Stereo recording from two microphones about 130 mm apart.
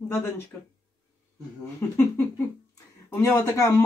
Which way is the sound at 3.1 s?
25° left (ahead or behind).